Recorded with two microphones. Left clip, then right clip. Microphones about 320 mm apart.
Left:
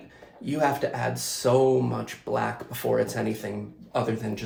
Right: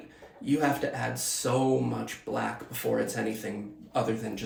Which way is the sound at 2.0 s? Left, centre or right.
Centre.